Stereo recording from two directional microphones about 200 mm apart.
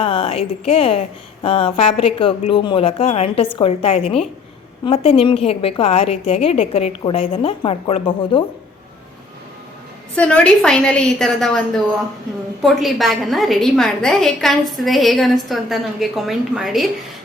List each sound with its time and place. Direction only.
0.0 s a woman's voice: 30° left (ahead or behind)
10.2 s a woman's voice: 5° left (ahead or behind)